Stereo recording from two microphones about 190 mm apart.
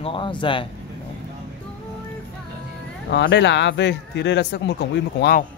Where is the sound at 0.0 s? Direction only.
25° left (ahead or behind).